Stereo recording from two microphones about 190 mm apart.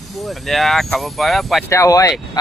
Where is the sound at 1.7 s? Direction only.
15° left (ahead or behind).